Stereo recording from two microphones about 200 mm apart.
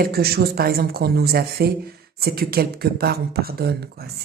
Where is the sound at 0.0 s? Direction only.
50° right (ahead or behind).